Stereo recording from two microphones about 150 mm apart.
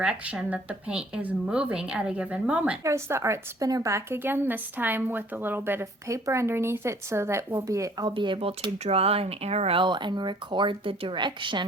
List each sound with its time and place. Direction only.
0.0 s a woman's voice: 5° right (ahead or behind)
2.8 s a woman's voice: 20° right (ahead or behind)